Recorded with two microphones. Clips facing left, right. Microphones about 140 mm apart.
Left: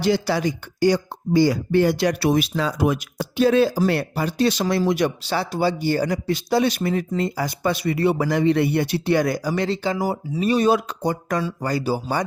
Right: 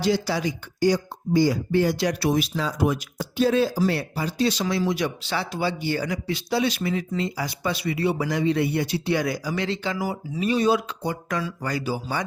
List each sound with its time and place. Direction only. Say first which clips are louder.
0.0 s speech: left 3 dB; 60° left (ahead or behind); by 10.6 s 40° left (ahead or behind)
10.6 s speech: left 3 dB; 50° left (ahead or behind)